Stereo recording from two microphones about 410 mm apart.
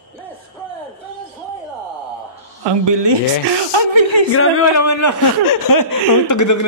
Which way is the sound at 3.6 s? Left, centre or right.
Right.